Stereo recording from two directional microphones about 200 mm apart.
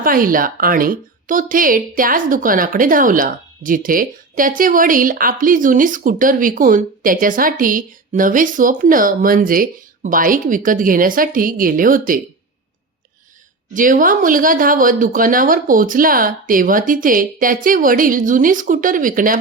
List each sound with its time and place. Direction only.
0.0 s speech: 45° right (ahead or behind)
13.7 s speech: 40° right (ahead or behind)